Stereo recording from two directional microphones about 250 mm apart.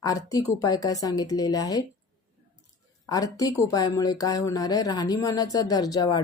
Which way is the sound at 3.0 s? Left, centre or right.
Centre.